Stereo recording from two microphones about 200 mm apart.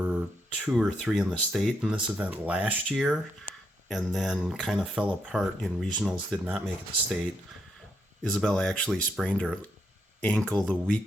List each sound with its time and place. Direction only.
0.0 s speech: 5° right (ahead or behind)
3.5 s a sound: 40° right (ahead or behind)
3.8 s speech: centre (ahead or behind)
8.2 s speech: 5° left (ahead or behind)